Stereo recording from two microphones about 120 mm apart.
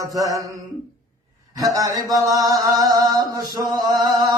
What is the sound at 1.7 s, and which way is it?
Speech, 25° right (ahead or behind).